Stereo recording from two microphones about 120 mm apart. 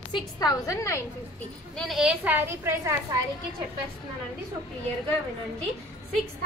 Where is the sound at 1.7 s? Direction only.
Centre (ahead or behind).